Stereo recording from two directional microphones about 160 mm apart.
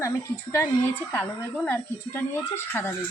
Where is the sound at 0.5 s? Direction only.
10° left (ahead or behind).